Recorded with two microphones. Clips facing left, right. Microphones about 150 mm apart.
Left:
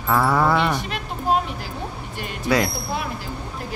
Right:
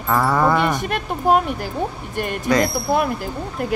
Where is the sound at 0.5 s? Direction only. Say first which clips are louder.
Right 2 dB; 10° right (ahead or behind).